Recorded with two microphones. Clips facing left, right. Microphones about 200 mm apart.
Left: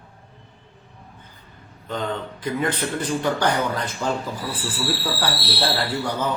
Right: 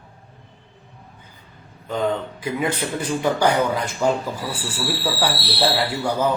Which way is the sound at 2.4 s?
10° right (ahead or behind).